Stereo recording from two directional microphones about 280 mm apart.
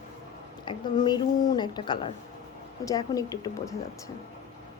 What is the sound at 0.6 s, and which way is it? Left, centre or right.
A woman's voice, centre.